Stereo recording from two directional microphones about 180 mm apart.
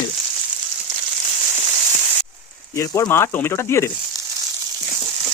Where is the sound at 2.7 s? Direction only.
15° left (ahead or behind).